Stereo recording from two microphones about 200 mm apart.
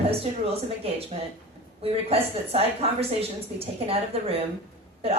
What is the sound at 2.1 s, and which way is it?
A woman's voice, 30° right (ahead or behind).